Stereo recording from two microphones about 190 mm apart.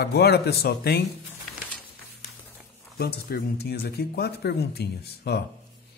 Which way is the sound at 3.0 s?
55° left (ahead or behind).